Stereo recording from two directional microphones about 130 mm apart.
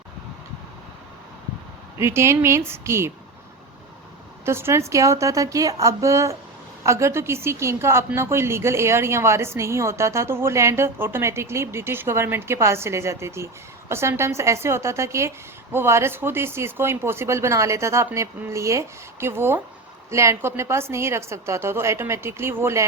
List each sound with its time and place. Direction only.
2.0 s a woman's voice: 20° right (ahead or behind)
4.4 s a woman's voice: 20° right (ahead or behind)